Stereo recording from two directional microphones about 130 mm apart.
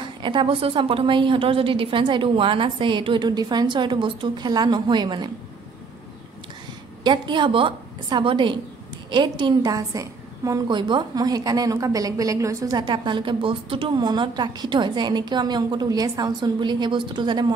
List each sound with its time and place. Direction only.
0.0 s a woman's voice: 40° right (ahead or behind)
7.0 s a woman's voice: 35° right (ahead or behind)
10.7 s a woman's voice: 40° right (ahead or behind)